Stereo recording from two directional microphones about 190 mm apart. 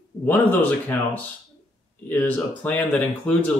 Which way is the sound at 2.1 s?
10° left (ahead or behind).